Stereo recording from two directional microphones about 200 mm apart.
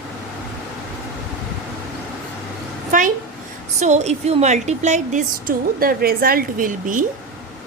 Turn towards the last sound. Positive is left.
turn(degrees=-40)  # may be behind; listen again after turning